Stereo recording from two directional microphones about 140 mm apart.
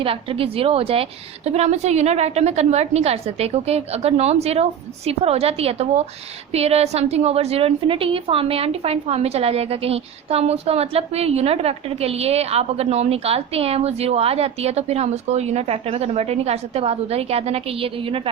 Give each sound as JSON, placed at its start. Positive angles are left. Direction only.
{"t": 0.0, "sound": "a woman's voice", "side_deg": -40}